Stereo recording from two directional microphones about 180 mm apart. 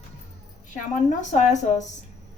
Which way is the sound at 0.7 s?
45° left (ahead or behind).